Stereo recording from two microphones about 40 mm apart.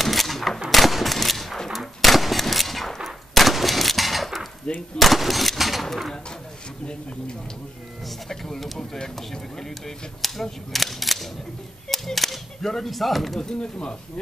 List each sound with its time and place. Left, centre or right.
0.0 s a sound: centre
1.7 s gunshot: centre
3.3 s a sound: centre
4.9 s speech: centre
8.3 s speech: centre
13.4 s speech: centre